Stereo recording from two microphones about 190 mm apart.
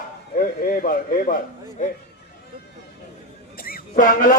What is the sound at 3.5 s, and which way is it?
Music, 50° left (ahead or behind).